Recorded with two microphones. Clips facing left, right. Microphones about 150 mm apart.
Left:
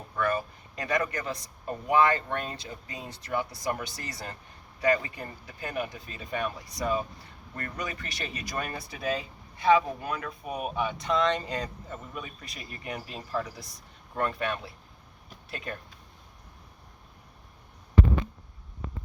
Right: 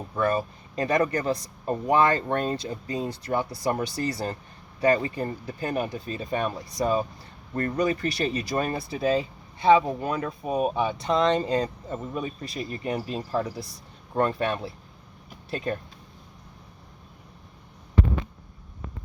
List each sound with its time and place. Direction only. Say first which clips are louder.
0.2 s speech: right 4 dB; 30° right (ahead or behind)